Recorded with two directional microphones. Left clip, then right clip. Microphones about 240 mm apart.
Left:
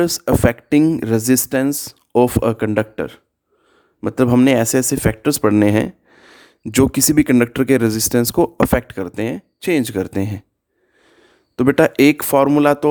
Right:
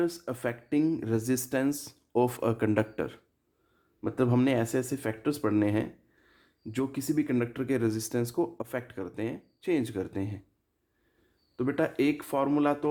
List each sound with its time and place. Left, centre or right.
0.0 s speech: left
11.5 s speech: left